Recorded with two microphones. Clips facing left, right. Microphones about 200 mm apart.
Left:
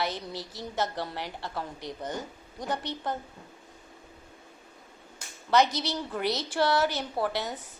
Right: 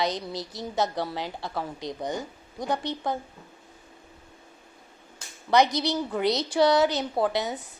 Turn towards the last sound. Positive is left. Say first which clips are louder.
# right 4 dB
turn(degrees=-15)  # may be behind; listen again after turning